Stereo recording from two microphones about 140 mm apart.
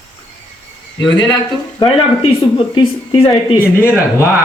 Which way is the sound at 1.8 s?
40° left (ahead or behind).